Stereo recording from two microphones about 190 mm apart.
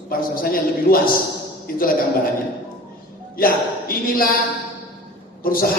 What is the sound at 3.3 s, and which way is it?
Speech, 50° left (ahead or behind).